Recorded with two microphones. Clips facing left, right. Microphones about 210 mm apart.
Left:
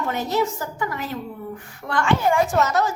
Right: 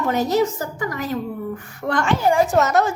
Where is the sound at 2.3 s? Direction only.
40° right (ahead or behind).